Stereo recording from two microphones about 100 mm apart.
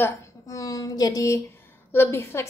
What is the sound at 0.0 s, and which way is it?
Speech, 30° left (ahead or behind).